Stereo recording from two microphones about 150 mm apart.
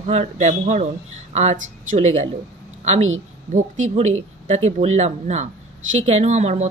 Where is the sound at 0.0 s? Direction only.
50° right (ahead or behind).